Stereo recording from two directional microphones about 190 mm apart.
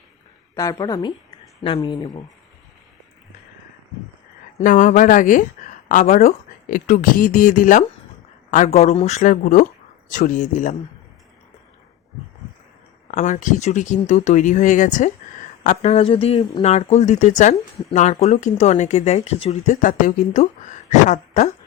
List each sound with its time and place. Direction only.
0.6 s a woman's voice: 20° left (ahead or behind)
4.5 s speech: 45° left (ahead or behind)
13.1 s speech: 40° left (ahead or behind)